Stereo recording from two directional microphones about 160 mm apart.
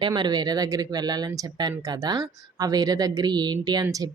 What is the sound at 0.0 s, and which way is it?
Speech, 25° right (ahead or behind).